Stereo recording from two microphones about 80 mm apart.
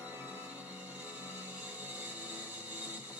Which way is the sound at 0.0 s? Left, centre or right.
Centre.